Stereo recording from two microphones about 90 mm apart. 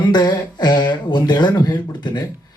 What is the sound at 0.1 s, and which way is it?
Speech, 50° left (ahead or behind).